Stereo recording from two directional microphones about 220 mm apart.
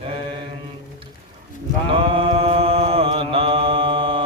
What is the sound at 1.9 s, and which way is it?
Mantra, 25° right (ahead or behind).